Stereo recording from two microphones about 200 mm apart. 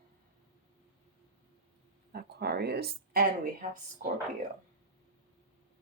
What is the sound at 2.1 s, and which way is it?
A woman's voice, 55° right (ahead or behind).